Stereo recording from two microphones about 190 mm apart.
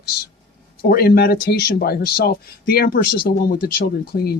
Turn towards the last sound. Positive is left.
turn(degrees=50)  # may be behind; listen again after turning